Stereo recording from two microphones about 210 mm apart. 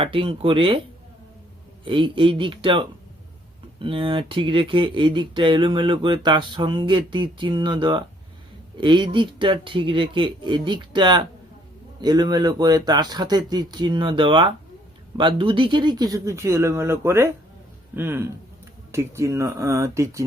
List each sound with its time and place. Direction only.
0.0 s speech: 25° right (ahead or behind)
1.8 s speech: 25° right (ahead or behind)